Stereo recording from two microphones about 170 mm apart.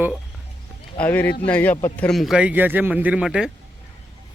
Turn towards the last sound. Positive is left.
turn(degrees=-5)  # may be behind; listen again after turning